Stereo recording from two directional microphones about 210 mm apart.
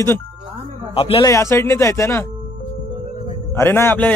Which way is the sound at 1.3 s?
15° left (ahead or behind).